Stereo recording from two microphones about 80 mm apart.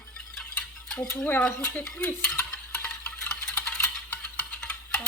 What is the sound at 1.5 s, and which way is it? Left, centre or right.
Speech, left.